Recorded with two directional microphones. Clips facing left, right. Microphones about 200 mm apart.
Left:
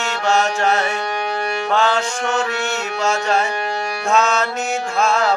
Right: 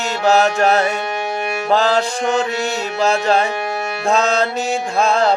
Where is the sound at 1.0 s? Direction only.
20° right (ahead or behind).